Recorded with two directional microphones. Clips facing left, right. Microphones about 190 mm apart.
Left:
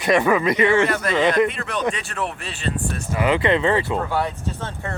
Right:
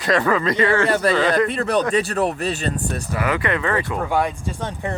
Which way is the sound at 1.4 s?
35° right (ahead or behind).